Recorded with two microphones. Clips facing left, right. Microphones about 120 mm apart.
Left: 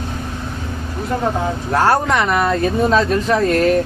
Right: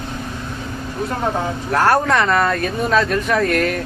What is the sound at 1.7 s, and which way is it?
Speech, 20° left (ahead or behind).